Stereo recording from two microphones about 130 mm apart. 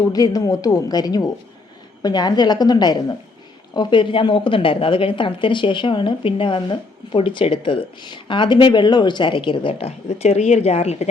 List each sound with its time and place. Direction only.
0.1 s a woman's voice: 30° left (ahead or behind); by 11.1 s 55° left (ahead or behind)